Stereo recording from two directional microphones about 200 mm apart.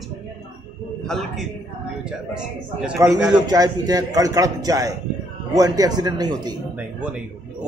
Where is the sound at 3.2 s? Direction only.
20° right (ahead or behind).